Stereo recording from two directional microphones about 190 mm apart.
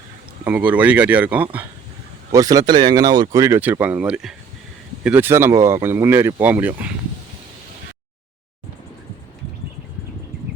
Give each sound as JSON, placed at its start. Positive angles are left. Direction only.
{"t": 0.4, "sound": "speech", "side_deg": -10}
{"t": 2.3, "sound": "speech", "side_deg": -20}